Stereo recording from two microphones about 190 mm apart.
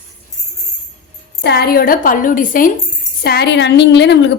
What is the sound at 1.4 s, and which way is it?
A woman's voice, 60° left (ahead or behind).